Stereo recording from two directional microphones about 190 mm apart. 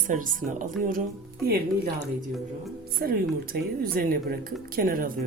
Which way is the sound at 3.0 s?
55° right (ahead or behind).